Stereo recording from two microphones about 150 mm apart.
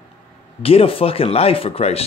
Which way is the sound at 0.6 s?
40° left (ahead or behind).